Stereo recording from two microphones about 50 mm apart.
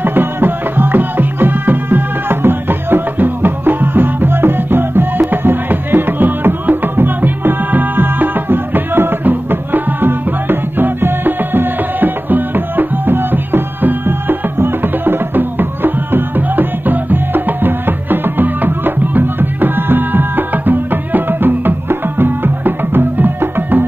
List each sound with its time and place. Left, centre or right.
0.0 s music: right